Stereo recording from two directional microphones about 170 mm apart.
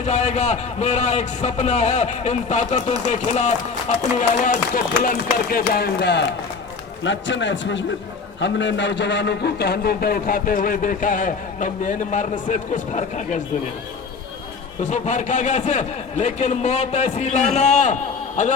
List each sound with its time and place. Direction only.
0.0 s a man's voice: 45° left (ahead or behind)
14.8 s a man's voice: 45° left (ahead or behind)